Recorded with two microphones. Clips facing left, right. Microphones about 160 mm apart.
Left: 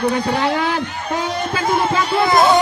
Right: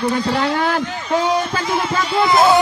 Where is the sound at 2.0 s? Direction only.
55° left (ahead or behind).